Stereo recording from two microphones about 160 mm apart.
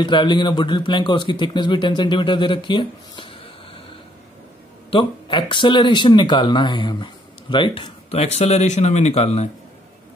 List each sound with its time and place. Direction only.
0.0 s a man's voice: 30° left (ahead or behind)
4.9 s speech: 30° left (ahead or behind)